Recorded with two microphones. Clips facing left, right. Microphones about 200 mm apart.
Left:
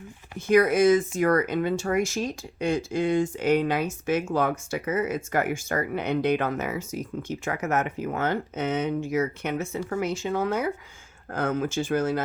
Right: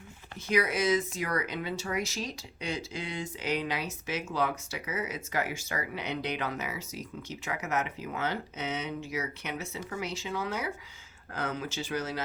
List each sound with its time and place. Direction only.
0.3 s speech: 50° left (ahead or behind)